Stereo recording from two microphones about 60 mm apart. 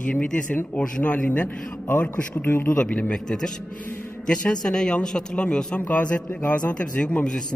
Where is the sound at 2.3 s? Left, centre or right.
Left.